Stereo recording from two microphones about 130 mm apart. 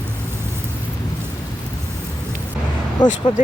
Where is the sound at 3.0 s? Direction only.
30° left (ahead or behind).